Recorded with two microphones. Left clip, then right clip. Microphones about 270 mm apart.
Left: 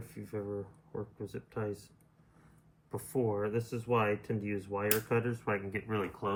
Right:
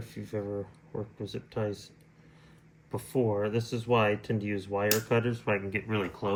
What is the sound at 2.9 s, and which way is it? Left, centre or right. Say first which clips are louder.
Speech: right 4 dB; right.